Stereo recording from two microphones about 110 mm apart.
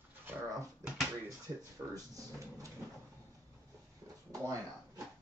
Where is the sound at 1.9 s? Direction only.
30° right (ahead or behind).